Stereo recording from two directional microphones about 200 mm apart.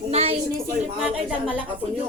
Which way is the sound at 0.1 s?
30° right (ahead or behind).